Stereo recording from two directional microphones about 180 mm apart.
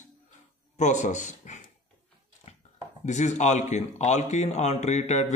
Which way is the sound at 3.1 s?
40° left (ahead or behind).